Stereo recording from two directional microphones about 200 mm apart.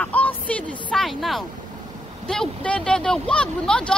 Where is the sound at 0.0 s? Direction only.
5° left (ahead or behind).